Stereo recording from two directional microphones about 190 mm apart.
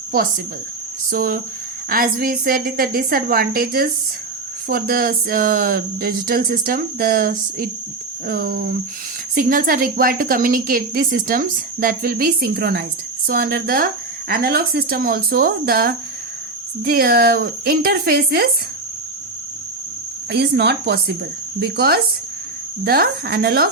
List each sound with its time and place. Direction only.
0.1 s a woman's voice: 50° right (ahead or behind)
20.3 s a woman's voice: 60° right (ahead or behind)